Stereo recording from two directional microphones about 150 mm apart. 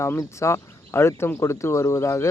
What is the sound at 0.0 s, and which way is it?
Speech, 20° left (ahead or behind).